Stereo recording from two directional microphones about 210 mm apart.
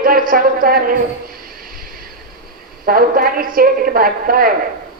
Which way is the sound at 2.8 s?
45° right (ahead or behind).